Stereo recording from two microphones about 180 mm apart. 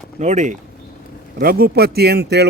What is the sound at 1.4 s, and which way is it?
Speech, 55° right (ahead or behind).